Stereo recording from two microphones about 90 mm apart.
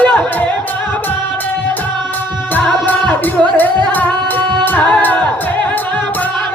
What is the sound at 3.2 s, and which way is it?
Music, 20° left (ahead or behind).